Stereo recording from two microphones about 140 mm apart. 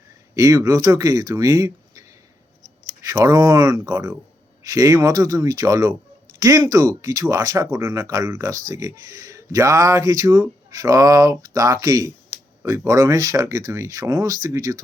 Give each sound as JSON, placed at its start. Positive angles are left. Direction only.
{"t": 0.3, "sound": "speech", "side_deg": -25}